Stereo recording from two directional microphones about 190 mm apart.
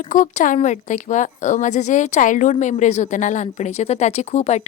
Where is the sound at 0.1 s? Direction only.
45° left (ahead or behind).